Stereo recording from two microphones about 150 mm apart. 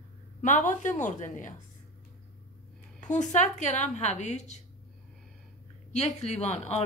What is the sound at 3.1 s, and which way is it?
Speech, 55° left (ahead or behind).